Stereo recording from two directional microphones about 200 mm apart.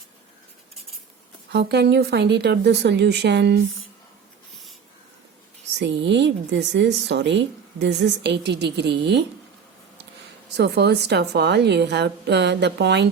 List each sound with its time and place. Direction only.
1.5 s a woman's voice: 55° right (ahead or behind)
5.8 s a woman's voice: 60° right (ahead or behind)
10.6 s a woman's voice: 55° right (ahead or behind)